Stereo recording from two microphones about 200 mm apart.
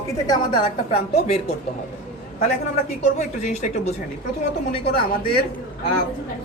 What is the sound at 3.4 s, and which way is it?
Speech, 35° left (ahead or behind).